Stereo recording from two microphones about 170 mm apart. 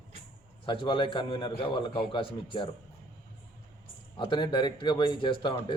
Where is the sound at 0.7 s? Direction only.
30° left (ahead or behind).